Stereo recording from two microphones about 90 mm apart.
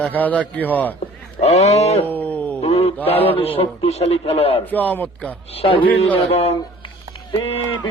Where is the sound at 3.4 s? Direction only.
90° left.